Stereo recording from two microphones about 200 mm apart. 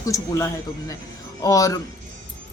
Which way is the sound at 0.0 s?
15° left (ahead or behind).